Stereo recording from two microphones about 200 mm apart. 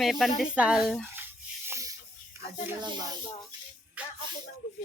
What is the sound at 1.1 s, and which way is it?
Rub, 10° right (ahead or behind).